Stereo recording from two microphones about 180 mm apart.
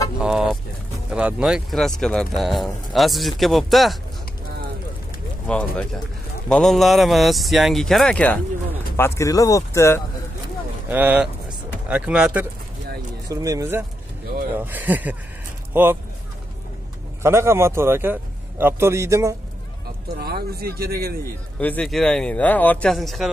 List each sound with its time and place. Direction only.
0.2 s a sound: 5° right (ahead or behind)
1.1 s speech: 5° right (ahead or behind)
5.5 s speech: 5° left (ahead or behind)
10.9 s a man's voice: 10° right (ahead or behind)
13.3 s a man's voice: 20° right (ahead or behind)
17.2 s a man's voice: 15° right (ahead or behind)
20.2 s speech: 60° right (ahead or behind)
21.5 s speech: 10° left (ahead or behind)